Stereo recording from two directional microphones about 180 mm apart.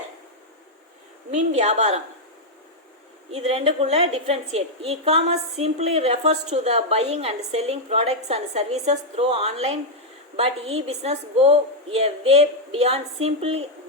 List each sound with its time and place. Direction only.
1.3 s a woman's voice: 35° right (ahead or behind)
3.3 s a woman's voice: 35° right (ahead or behind)